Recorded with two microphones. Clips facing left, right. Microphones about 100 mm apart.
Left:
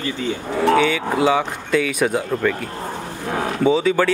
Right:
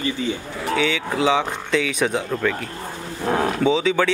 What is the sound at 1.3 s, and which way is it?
Speech, 5° left (ahead or behind).